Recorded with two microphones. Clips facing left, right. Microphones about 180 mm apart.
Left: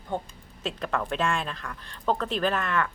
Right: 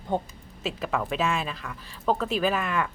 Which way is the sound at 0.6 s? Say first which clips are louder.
Right 1 dB; 5° right (ahead or behind).